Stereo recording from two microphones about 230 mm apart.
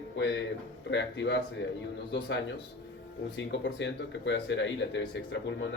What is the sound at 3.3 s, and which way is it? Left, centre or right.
Speech, left.